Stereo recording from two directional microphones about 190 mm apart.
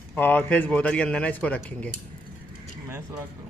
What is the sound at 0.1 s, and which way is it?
A man's voice, 10° left (ahead or behind).